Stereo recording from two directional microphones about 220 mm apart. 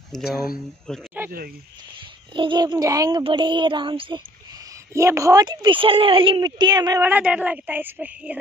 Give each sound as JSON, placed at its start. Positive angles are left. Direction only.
{"t": 0.1, "sound": "speech", "side_deg": 0}
{"t": 2.3, "sound": "child singing", "side_deg": -20}
{"t": 4.9, "sound": "a woman's voice", "side_deg": -15}